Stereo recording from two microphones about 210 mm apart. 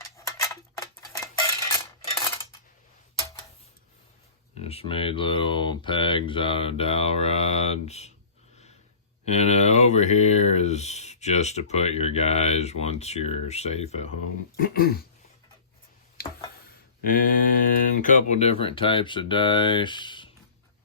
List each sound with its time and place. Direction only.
0.0 s a sound: 15° left (ahead or behind)
4.6 s speech: 30° left (ahead or behind)
9.2 s speech: 30° left (ahead or behind)
14.6 s dog: 45° left (ahead or behind)
16.2 s a sound: 50° left (ahead or behind)
17.0 s speech: 40° left (ahead or behind); by 20.3 s 20° left (ahead or behind)